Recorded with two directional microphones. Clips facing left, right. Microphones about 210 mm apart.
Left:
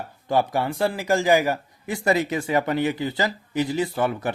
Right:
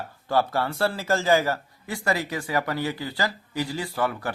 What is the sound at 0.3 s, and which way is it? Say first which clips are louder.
Speech: left 2 dB; 15° left (ahead or behind).